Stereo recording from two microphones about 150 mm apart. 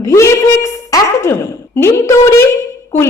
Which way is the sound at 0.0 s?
20° left (ahead or behind).